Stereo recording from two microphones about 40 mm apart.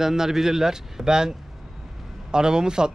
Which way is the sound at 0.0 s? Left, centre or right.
Centre.